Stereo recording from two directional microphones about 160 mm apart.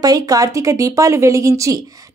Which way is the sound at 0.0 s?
25° right (ahead or behind).